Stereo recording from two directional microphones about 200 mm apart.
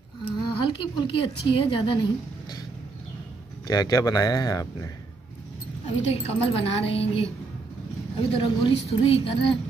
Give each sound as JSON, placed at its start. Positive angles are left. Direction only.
{"t": 0.2, "sound": "speech", "side_deg": 25}
{"t": 3.6, "sound": "speech", "side_deg": 20}
{"t": 6.2, "sound": "a woman's voice", "side_deg": 30}